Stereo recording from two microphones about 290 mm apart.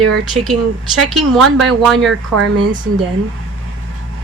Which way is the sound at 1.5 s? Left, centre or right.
Centre.